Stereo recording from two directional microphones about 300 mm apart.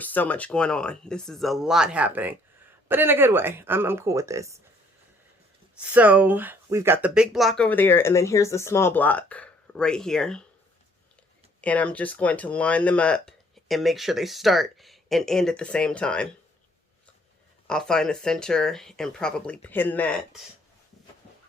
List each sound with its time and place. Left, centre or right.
0.0 s speech: centre
5.8 s speech: centre
11.6 s speech: centre
17.7 s speech: centre